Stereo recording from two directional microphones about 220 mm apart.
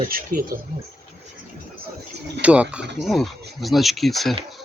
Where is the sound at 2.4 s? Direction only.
5° right (ahead or behind).